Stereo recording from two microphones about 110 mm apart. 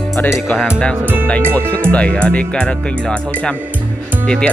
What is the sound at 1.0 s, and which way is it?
Speech, 20° right (ahead or behind).